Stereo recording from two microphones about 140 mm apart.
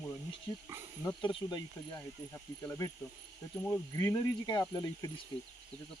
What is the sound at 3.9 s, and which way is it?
Speech, 25° left (ahead or behind).